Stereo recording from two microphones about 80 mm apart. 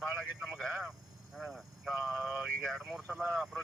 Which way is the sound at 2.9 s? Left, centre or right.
Centre.